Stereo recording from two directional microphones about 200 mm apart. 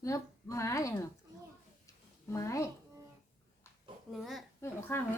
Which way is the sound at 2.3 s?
15° left (ahead or behind).